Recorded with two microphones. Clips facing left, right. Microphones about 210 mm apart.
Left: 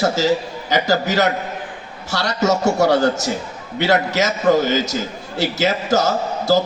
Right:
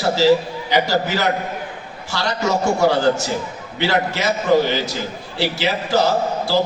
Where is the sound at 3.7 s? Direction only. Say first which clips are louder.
Left 3 dB; 45° left (ahead or behind).